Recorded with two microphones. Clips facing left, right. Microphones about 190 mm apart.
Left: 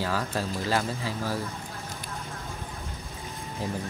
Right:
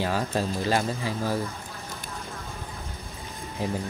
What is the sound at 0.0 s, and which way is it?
Speech, 20° right (ahead or behind).